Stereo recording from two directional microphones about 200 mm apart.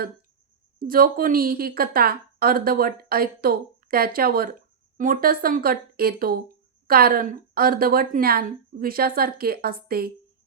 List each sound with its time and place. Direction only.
0.8 s a woman's voice: 45° right (ahead or behind)